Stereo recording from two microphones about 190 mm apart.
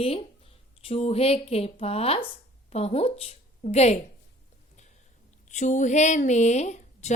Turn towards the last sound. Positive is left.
turn(degrees=35)  # may be behind; listen again after turning